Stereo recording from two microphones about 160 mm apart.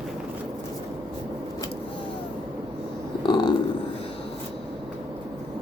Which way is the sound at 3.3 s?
25° left (ahead or behind).